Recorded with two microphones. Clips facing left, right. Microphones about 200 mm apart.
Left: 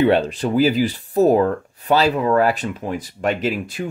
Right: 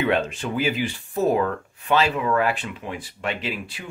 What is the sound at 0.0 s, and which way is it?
Speech, 35° left (ahead or behind).